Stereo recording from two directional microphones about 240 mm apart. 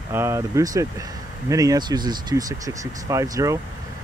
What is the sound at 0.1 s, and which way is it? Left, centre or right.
Speech, centre.